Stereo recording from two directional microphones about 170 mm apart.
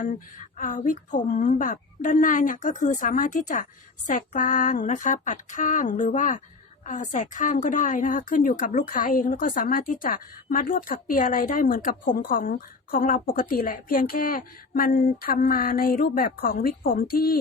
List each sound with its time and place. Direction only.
0.0 s a woman's voice: 50° left (ahead or behind)